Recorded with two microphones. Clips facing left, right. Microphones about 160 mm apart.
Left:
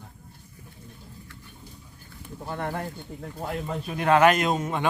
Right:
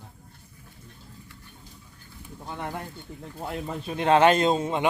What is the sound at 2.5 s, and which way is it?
Speech, 55° left (ahead or behind).